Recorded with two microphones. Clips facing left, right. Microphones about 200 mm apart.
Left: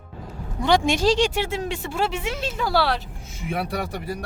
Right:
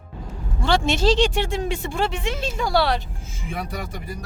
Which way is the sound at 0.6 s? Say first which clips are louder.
Left 1 dB; 15° left (ahead or behind).